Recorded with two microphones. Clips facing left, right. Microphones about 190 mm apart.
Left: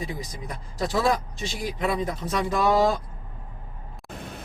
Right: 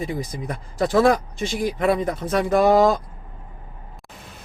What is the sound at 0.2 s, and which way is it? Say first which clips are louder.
Speech: right 7 dB; 50° right (ahead or behind).